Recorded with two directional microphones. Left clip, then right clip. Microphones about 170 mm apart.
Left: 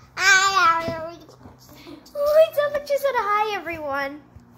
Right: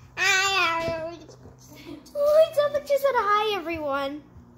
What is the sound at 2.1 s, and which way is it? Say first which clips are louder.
A child's voice: left 2 dB; 30° right (ahead or behind).